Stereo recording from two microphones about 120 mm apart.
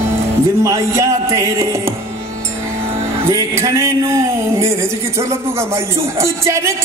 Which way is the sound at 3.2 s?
25° right (ahead or behind).